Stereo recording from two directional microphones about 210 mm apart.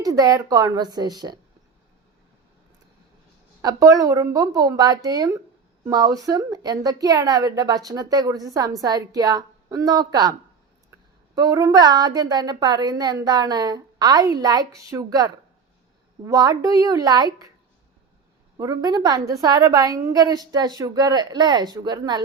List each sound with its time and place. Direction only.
0.0 s a woman's voice: 15° right (ahead or behind)
3.6 s a woman's voice: 15° right (ahead or behind)
11.3 s a woman's voice: 15° right (ahead or behind)
18.5 s a woman's voice: 20° right (ahead or behind)